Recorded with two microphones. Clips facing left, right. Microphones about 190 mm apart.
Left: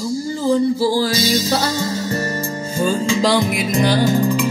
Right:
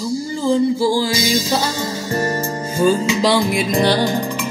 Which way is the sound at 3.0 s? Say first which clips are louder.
Even; centre (ahead or behind).